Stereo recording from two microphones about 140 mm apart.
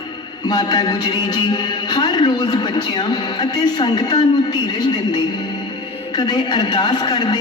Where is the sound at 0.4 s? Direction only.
30° left (ahead or behind).